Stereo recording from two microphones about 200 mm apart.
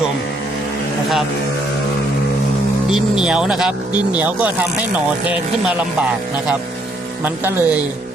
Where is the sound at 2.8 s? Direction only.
5° right (ahead or behind).